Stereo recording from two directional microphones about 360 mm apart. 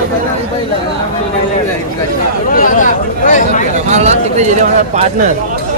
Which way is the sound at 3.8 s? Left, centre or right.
Centre.